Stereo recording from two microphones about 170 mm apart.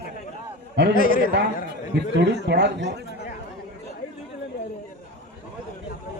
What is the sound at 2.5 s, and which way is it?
Speech, 90° right.